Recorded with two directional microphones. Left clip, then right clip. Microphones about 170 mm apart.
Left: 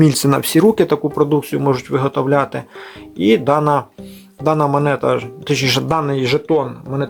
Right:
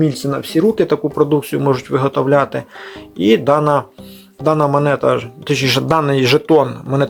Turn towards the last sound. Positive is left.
turn(degrees=-20)  # may be behind; listen again after turning